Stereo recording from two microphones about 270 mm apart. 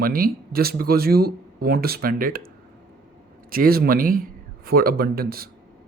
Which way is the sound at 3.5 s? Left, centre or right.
Right.